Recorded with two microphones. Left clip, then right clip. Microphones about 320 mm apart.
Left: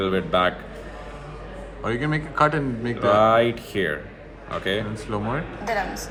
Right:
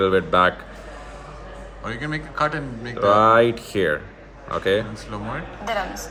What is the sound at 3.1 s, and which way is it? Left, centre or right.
A man's voice, right.